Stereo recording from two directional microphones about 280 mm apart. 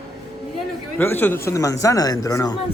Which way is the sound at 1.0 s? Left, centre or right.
Centre.